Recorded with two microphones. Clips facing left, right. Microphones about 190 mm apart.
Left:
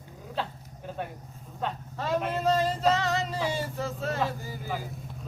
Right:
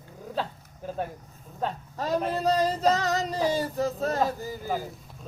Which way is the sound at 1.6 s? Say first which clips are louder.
Right 2 dB; 40° right (ahead or behind).